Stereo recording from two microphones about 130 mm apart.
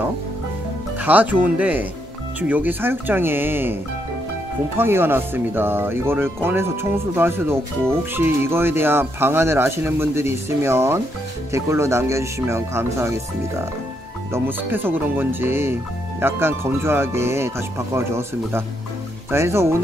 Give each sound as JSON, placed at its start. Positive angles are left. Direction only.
{"t": 0.9, "sound": "speech", "side_deg": -15}
{"t": 4.7, "sound": "speech", "side_deg": -15}
{"t": 14.3, "sound": "speech", "side_deg": -15}